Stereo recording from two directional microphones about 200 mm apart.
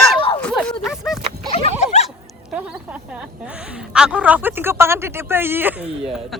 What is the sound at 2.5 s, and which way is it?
A woman's voice, 5° right (ahead or behind).